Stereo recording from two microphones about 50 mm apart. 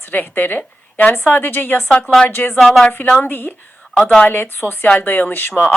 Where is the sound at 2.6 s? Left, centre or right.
Centre.